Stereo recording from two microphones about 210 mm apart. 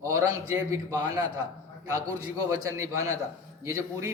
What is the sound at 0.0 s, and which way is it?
A man's voice, 15° right (ahead or behind).